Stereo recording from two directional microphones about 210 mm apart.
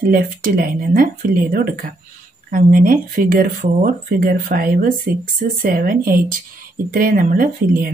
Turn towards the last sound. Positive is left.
turn(degrees=-40)  # may be behind; listen again after turning